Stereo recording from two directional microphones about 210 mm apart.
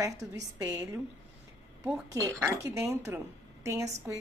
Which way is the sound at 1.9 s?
15° right (ahead or behind).